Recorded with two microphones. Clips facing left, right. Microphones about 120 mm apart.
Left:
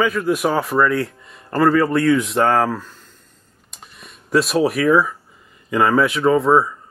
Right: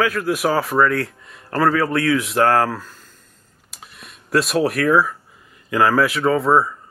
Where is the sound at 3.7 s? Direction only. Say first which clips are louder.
Even; centre (ahead or behind).